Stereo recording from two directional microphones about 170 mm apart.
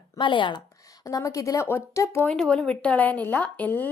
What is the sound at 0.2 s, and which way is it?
A woman's voice, 30° left (ahead or behind).